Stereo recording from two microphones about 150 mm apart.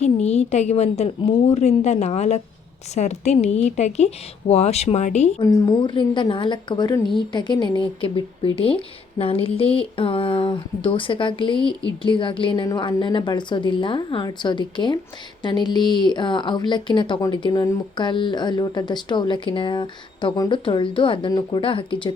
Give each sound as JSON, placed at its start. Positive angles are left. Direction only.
{"t": 0.0, "sound": "a woman's voice", "side_deg": 45}
{"t": 5.4, "sound": "speech", "side_deg": 25}